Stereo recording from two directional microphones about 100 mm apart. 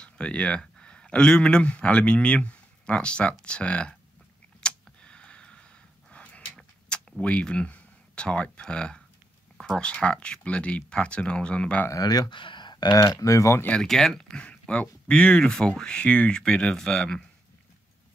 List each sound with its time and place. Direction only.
0.0 s speech: 10° left (ahead or behind)
4.6 s a sound: 10° left (ahead or behind)
9.6 s speech: 10° left (ahead or behind)
11.9 s speech: 40° left (ahead or behind)
13.7 s speech: 5° left (ahead or behind)